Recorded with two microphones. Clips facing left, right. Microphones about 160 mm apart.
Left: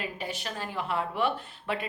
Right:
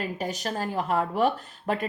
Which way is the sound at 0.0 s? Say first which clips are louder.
Right 5 dB; 40° right (ahead or behind).